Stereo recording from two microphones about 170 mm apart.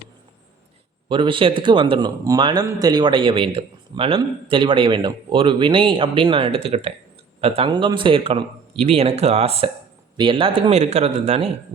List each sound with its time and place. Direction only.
1.0 s a man's voice: 30° right (ahead or behind)